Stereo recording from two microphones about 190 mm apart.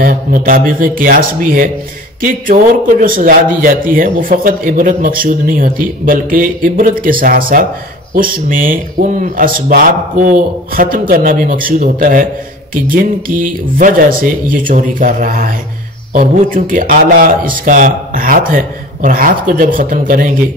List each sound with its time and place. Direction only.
0.0 s a man's voice: 50° right (ahead or behind)